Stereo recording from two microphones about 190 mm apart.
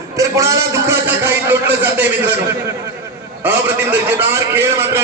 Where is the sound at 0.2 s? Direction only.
15° right (ahead or behind).